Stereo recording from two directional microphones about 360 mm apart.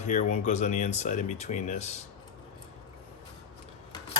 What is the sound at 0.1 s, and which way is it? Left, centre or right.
Speech, centre.